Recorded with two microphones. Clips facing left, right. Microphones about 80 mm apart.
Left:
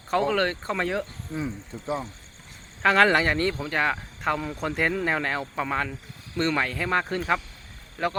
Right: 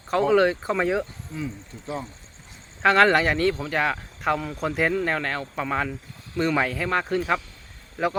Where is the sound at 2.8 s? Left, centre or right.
Centre.